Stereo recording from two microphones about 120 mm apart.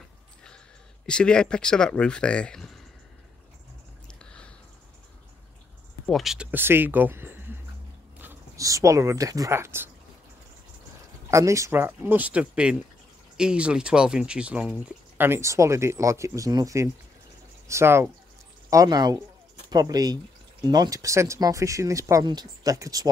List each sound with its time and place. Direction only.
1.0 s speech: 5° left (ahead or behind)
4.2 s a sound: 10° left (ahead or behind)
6.0 s speech: centre (ahead or behind); by 7.5 s 15° right (ahead or behind)
8.5 s speech: 25° right (ahead or behind)
11.2 s speech: 25° right (ahead or behind); by 15.2 s 10° right (ahead or behind)
15.2 s speech: 20° right (ahead or behind)
18.7 s speech: 30° right (ahead or behind)